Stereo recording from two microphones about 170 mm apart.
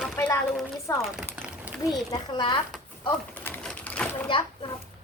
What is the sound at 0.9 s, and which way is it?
Speech, 15° left (ahead or behind).